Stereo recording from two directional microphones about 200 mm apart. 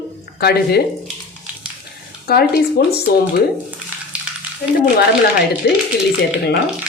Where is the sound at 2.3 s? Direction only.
50° left (ahead or behind).